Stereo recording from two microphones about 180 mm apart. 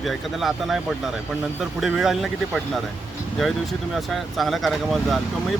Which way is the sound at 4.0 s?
Centre (ahead or behind).